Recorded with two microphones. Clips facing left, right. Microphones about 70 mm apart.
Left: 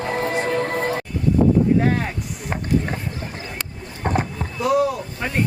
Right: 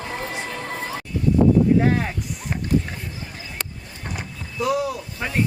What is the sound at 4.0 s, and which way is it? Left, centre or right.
Horse, left.